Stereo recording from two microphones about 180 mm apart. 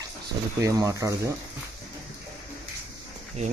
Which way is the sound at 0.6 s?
20° right (ahead or behind).